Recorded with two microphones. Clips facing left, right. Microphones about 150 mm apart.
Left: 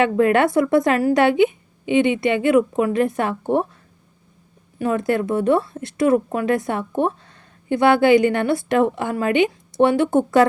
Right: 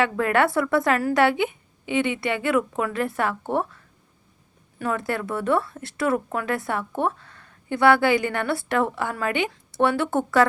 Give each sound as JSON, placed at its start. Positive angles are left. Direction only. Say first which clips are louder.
{"t": 0.0, "sound": "a woman's voice", "louder": "left 5 dB", "side_deg": 20}
{"t": 4.8, "sound": "a woman's voice", "louder": "left 6 dB", "side_deg": 20}